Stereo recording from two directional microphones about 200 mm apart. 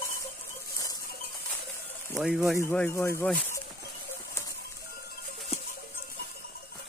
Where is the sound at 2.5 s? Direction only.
10° left (ahead or behind).